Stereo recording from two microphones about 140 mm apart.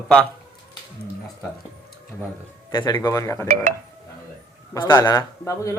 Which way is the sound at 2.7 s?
30° left (ahead or behind).